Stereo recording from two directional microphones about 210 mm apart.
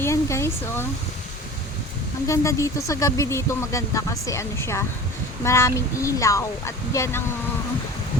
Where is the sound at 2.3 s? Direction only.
15° left (ahead or behind).